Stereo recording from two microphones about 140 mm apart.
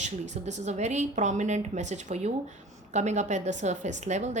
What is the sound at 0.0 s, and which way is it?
A woman's voice, 55° right (ahead or behind).